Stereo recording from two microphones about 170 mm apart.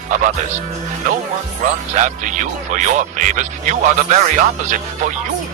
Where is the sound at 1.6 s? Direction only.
50° right (ahead or behind).